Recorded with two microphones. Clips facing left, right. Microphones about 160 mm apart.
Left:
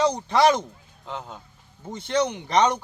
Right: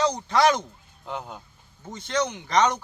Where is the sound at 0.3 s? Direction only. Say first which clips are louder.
Left 1 dB; 25° left (ahead or behind).